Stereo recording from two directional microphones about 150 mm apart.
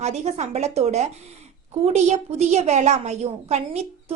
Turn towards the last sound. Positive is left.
turn(degrees=-45)  # may be behind; listen again after turning